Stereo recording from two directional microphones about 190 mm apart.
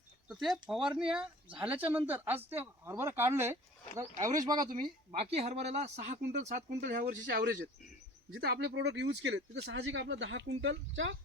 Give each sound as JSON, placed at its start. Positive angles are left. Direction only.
{"t": 0.3, "sound": "speech", "side_deg": 0}